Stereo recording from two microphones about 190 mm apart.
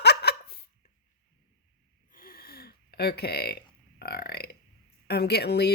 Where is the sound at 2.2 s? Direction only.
50° left (ahead or behind).